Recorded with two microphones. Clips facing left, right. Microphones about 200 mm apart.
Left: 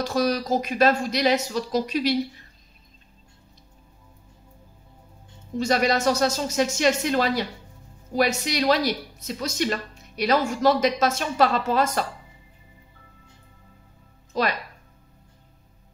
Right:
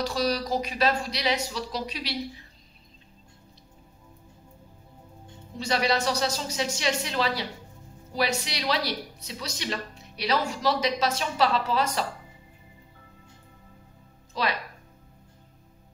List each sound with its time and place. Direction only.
0.0 s a woman's voice: 50° left (ahead or behind)
5.6 s a woman's voice: 45° left (ahead or behind)
14.3 s a woman's voice: 45° left (ahead or behind)